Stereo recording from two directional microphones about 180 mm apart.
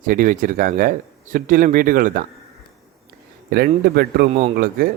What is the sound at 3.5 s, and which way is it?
A man's voice, 60° right (ahead or behind).